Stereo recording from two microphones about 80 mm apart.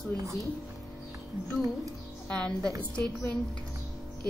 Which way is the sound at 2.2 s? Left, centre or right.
Centre.